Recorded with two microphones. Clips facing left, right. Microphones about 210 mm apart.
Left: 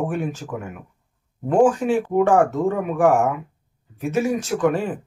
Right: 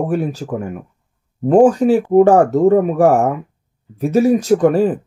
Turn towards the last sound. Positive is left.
turn(degrees=-40)  # may be behind; listen again after turning